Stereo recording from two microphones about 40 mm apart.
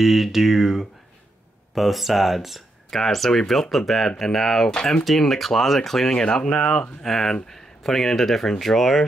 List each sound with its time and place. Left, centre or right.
0.0 s speech: centre
2.9 s speech: centre
4.6 s speech: left
5.0 s speech: centre